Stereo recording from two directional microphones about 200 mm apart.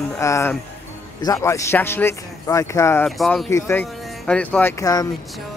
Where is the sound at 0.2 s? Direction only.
15° left (ahead or behind).